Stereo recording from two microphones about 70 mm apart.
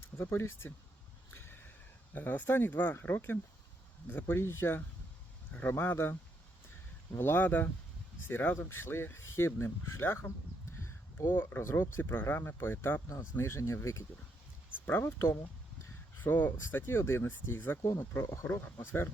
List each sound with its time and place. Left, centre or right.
0.2 s speech: left
1.3 s a sound: left
2.1 s speech: left
7.2 s speech: left
14.8 s speech: left